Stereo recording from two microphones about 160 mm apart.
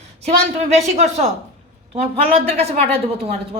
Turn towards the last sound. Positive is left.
turn(degrees=-40)  # may be behind; listen again after turning